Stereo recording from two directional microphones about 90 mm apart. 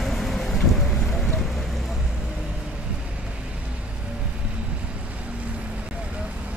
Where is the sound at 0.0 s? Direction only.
5° left (ahead or behind).